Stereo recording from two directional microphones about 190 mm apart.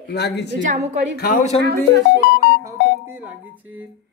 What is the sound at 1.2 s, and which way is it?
Speech, 45° left (ahead or behind).